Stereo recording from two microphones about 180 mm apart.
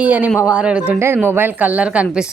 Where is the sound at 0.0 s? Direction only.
10° right (ahead or behind).